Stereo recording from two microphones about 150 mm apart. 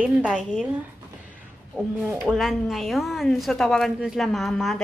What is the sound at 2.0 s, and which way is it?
A woman's voice, 5° right (ahead or behind).